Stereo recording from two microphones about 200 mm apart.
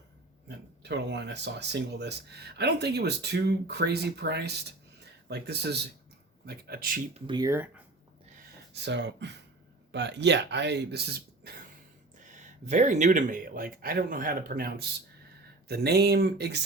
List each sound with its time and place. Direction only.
0.4 s speech: 60° right (ahead or behind)
7.3 s speech: 20° right (ahead or behind)
8.7 s speech: 60° right (ahead or behind)
12.2 s speech: 35° right (ahead or behind); by 16.6 s 55° right (ahead or behind)